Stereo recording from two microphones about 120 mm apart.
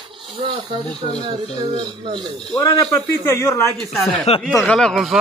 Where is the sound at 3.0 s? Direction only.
20° left (ahead or behind).